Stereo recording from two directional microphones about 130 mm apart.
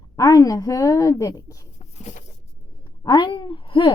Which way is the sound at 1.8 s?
60° left (ahead or behind).